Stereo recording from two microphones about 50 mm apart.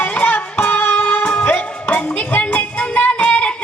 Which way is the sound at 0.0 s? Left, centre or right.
Left.